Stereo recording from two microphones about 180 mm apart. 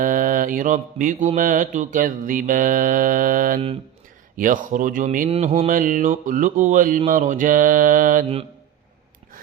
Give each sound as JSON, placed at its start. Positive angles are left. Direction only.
{"t": 0.0, "sound": "mantra", "side_deg": -50}
{"t": 5.3, "sound": "mantra", "side_deg": -35}